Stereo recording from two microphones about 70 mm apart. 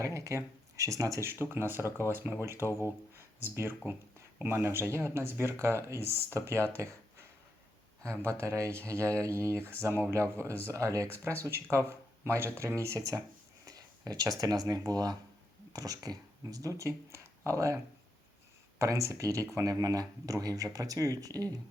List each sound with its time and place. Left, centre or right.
0.0 s speech: right
1.3 s speech: right
2.6 s speech: left
3.2 s speech: right
13.7 s speech: right
18.8 s speech: right